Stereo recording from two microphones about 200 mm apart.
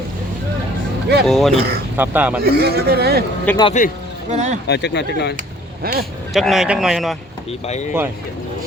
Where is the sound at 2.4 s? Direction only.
50° right (ahead or behind).